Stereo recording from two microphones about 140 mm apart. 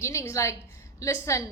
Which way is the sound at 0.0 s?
20° left (ahead or behind).